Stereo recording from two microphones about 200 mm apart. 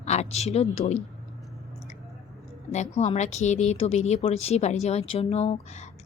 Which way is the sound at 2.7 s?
35° left (ahead or behind).